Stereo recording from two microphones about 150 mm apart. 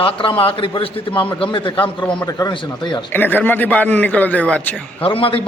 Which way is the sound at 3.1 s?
15° left (ahead or behind).